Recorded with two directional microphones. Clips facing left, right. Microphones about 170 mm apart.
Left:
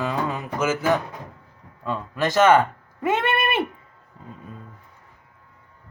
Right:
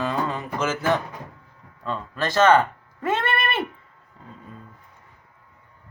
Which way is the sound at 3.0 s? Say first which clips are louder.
Left 2 dB; 15° left (ahead or behind).